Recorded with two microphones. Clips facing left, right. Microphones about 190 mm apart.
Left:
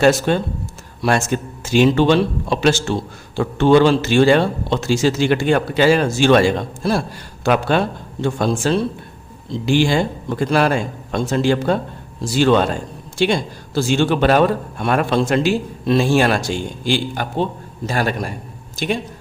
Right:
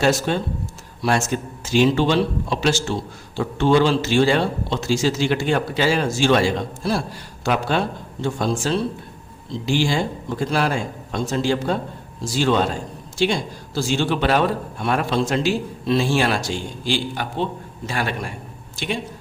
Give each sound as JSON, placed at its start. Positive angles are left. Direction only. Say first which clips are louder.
{"t": 0.3, "sound": "a man's voice", "louder": "left 4 dB", "side_deg": 60}
{"t": 17.8, "sound": "a man's voice", "louder": "left 5 dB", "side_deg": 40}